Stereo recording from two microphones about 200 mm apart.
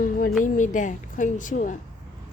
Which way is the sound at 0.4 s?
40° left (ahead or behind).